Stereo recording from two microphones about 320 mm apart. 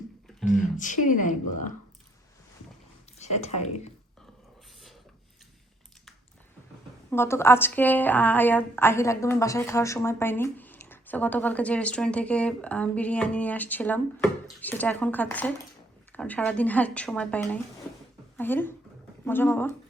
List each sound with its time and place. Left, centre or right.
0.6 s speech: left
3.2 s speech: left
7.1 s a woman's voice: centre